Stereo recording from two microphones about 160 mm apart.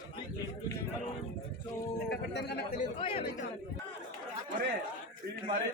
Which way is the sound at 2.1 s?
85° left.